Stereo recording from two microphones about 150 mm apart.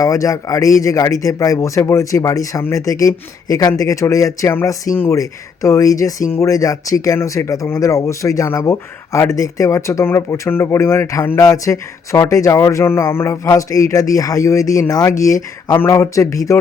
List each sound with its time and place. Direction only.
0.0 s speech: 20° left (ahead or behind)